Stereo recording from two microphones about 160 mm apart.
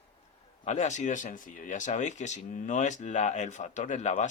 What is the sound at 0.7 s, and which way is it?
Speech, 45° left (ahead or behind).